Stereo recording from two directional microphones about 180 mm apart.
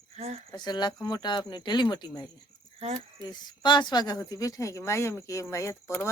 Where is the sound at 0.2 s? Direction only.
40° right (ahead or behind).